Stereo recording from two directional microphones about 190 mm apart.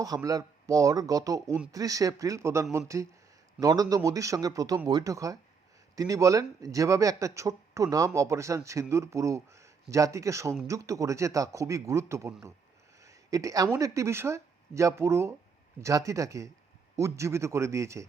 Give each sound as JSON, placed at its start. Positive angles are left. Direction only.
{"t": 0.0, "sound": "speech", "side_deg": -20}
{"t": 13.0, "sound": "a sound", "side_deg": -15}
{"t": 13.7, "sound": "speech", "side_deg": -15}